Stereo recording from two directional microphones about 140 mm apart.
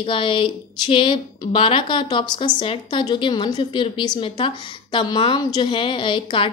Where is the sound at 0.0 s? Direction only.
40° left (ahead or behind).